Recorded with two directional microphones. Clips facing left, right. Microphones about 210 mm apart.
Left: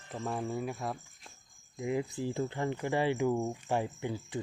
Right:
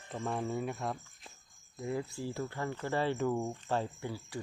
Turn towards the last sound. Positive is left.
turn(degrees=20)  # may be behind; listen again after turning